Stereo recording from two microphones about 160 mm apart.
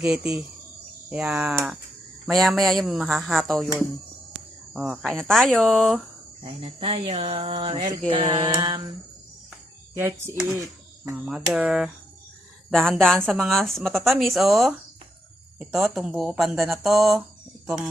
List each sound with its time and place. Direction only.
0.0 s speech: 5° right (ahead or behind)
4.7 s speech: centre (ahead or behind)
6.4 s a sound: 35° right (ahead or behind)
9.9 s speech: 15° right (ahead or behind)
11.3 s speech: 5° right (ahead or behind)